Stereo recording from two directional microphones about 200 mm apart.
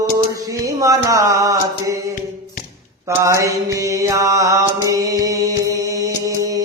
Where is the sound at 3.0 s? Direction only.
15° right (ahead or behind).